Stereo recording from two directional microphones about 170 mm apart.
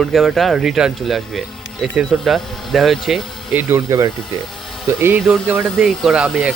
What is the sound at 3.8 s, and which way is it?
Speech, 20° right (ahead or behind).